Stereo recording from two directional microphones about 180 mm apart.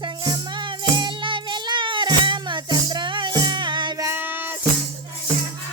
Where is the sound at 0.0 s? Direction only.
25° right (ahead or behind).